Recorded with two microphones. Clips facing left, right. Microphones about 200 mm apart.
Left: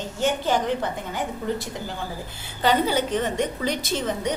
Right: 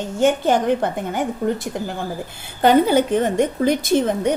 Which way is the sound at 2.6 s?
50° right (ahead or behind).